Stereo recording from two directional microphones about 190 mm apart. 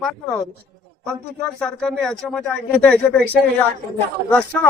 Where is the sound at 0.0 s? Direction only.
5° left (ahead or behind).